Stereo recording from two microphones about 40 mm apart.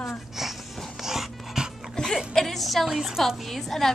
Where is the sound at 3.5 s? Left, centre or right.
Centre.